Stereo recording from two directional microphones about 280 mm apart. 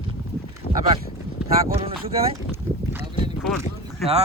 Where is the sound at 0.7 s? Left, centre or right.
Left.